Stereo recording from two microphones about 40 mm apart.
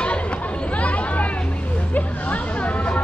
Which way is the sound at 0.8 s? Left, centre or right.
Left.